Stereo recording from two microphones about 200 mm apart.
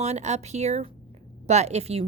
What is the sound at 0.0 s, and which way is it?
Speech, 35° right (ahead or behind).